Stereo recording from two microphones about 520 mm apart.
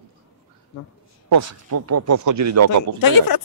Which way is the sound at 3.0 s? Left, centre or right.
Left.